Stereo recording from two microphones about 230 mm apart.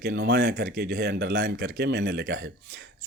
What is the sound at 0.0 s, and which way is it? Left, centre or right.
Speech, right.